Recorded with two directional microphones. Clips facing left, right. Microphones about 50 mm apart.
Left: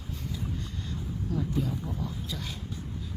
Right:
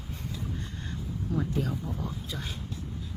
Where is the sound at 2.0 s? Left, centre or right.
Right.